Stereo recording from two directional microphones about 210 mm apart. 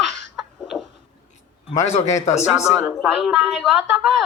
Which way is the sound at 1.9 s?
30° left (ahead or behind).